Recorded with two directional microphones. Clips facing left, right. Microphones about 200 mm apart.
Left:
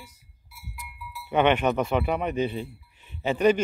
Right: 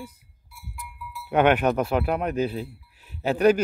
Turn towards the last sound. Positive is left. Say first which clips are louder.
# right 2 dB
turn(degrees=-5)  # may be behind; listen again after turning